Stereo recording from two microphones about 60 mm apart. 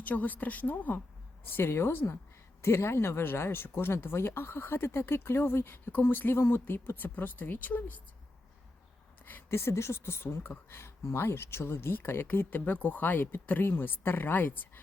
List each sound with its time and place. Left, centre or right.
0.0 s a woman's voice: left
1.5 s speech: left
9.5 s speech: left